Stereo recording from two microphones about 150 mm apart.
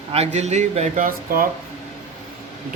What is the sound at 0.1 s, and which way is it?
Speech, 45° right (ahead or behind).